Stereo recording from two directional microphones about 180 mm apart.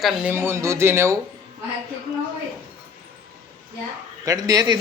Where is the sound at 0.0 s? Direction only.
5° right (ahead or behind).